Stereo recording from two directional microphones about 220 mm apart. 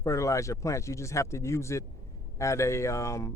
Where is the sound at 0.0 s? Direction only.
15° left (ahead or behind).